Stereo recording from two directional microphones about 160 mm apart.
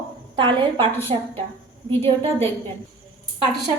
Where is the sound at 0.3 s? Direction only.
30° right (ahead or behind).